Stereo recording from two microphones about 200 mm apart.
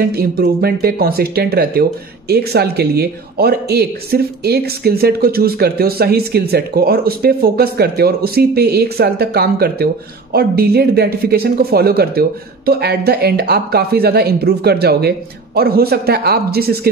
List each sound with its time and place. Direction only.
0.1 s speech: 50° right (ahead or behind)